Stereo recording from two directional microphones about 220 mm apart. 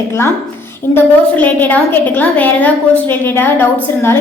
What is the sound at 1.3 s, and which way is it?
A woman's voice, 5° left (ahead or behind).